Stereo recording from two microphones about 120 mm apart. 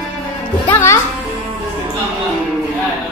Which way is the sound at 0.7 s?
20° left (ahead or behind).